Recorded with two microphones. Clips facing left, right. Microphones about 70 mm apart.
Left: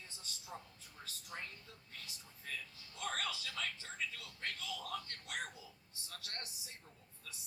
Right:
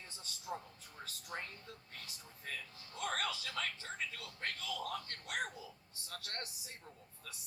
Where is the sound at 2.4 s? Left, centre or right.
Right.